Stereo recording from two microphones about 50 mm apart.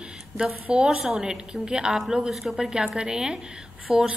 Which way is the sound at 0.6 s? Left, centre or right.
Right.